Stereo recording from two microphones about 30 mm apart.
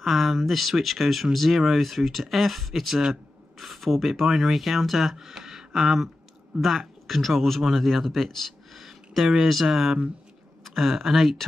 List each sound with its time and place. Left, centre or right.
0.0 s speech: centre
5.1 s speech: centre
6.6 s speech: centre
8.7 s a sound: centre
9.4 s speech: centre